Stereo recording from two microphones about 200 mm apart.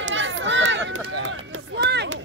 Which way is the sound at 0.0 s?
70° right (ahead or behind).